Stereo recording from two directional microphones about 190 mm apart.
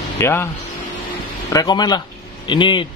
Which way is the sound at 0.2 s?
10° left (ahead or behind).